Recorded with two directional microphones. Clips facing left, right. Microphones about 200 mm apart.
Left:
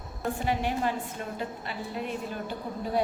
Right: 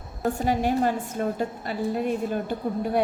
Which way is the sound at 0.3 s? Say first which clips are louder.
Right 6 dB; 45° right (ahead or behind).